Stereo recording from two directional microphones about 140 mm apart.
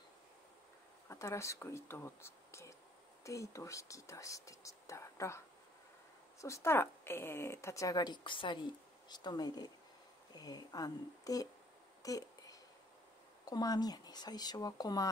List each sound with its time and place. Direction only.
1.0 s a woman's voice: 20° left (ahead or behind)
6.4 s a woman's voice: 20° left (ahead or behind)
12.0 s a sound: 25° left (ahead or behind)
13.5 s a woman's voice: 30° left (ahead or behind)